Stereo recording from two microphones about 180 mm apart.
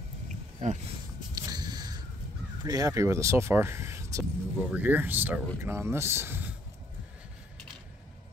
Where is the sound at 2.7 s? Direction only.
20° right (ahead or behind).